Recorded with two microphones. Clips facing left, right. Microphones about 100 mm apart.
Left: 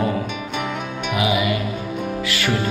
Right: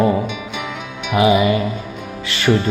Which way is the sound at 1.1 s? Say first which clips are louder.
Right 7 dB; 30° right (ahead or behind).